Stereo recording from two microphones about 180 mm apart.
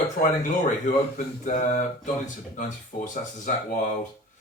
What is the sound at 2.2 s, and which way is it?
Speech, 45° left (ahead or behind).